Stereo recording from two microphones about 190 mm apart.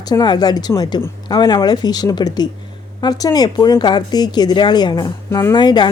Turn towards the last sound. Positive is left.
turn(degrees=25)  # may be behind; listen again after turning